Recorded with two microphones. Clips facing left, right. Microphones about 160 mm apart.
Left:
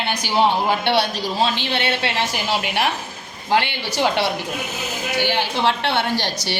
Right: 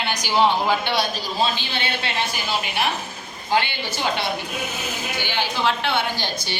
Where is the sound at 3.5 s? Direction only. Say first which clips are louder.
Left 2 dB; 70° left (ahead or behind).